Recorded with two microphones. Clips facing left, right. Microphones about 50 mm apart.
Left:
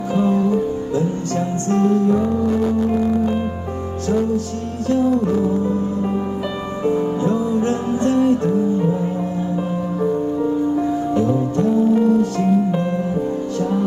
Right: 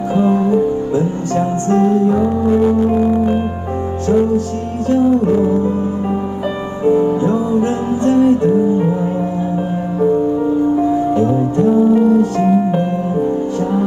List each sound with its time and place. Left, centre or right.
0.1 s music: right
4.8 s music: right
6.8 s music: right
10.8 s music: right